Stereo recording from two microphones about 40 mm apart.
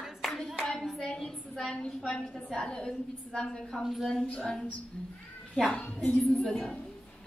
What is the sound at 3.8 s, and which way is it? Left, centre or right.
Speech, centre.